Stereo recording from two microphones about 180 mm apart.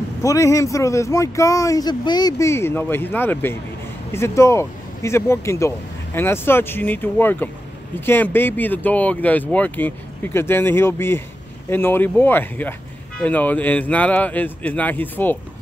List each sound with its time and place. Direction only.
0.2 s speech: 15° left (ahead or behind)